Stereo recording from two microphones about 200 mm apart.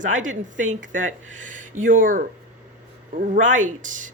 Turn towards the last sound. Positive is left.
turn(degrees=-40)  # may be behind; listen again after turning